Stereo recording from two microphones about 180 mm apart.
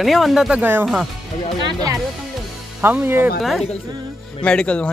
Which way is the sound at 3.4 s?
Centre (ahead or behind).